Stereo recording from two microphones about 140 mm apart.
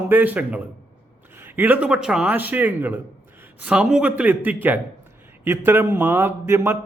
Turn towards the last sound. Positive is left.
turn(degrees=-15)  # may be behind; listen again after turning